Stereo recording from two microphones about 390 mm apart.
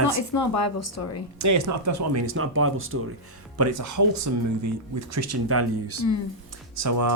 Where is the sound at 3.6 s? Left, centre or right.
Right.